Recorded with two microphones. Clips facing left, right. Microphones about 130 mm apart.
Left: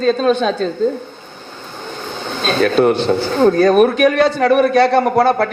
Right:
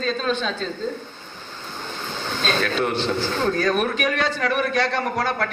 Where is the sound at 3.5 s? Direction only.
35° left (ahead or behind).